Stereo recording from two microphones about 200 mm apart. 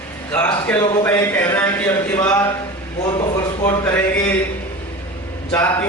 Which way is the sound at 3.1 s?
15° left (ahead or behind).